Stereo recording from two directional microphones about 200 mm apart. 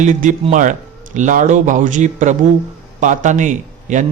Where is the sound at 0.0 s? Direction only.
40° right (ahead or behind).